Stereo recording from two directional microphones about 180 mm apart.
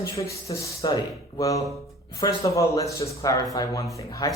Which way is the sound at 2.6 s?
15° left (ahead or behind).